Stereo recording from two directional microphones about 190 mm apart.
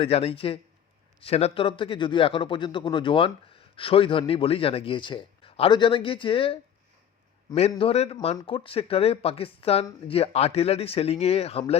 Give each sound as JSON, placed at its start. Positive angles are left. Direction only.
{"t": 0.0, "sound": "speech", "side_deg": 30}
{"t": 7.8, "sound": "speech", "side_deg": 30}